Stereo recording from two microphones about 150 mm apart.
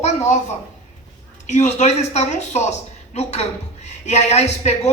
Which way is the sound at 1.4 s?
50° left (ahead or behind).